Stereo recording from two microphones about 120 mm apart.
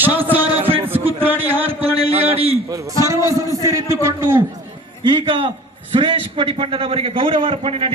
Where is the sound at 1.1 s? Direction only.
15° right (ahead or behind).